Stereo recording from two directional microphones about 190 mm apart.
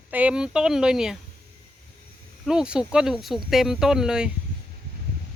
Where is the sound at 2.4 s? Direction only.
5° right (ahead or behind).